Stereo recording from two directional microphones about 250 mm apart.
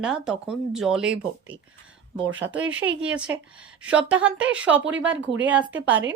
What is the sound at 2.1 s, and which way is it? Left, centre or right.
Speech, right.